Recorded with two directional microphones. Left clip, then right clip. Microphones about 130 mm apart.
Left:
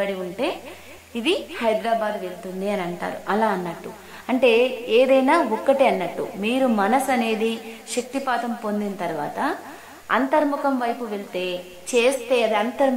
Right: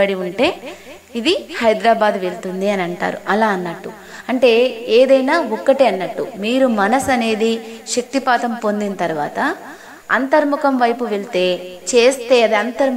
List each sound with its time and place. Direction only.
0.0 s a woman's voice: 45° right (ahead or behind)
1.1 s a woman's voice: 35° right (ahead or behind)
1.8 s a woman's voice: 50° right (ahead or behind); by 8.0 s 30° right (ahead or behind)
8.1 s a woman's voice: 40° right (ahead or behind); by 10.4 s 25° right (ahead or behind)
10.5 s a woman's voice: 40° right (ahead or behind)
11.9 s a woman's voice: 30° right (ahead or behind)